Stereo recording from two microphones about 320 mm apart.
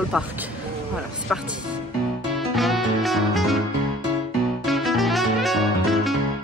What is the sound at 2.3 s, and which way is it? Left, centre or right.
Music, centre.